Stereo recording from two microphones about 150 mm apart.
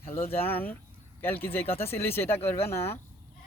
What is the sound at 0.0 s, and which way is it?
Speech, 40° left (ahead or behind).